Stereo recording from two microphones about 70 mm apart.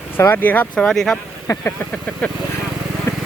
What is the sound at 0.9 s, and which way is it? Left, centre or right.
Speech, centre.